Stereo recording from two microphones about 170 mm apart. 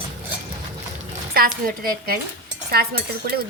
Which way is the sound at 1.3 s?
60° right (ahead or behind).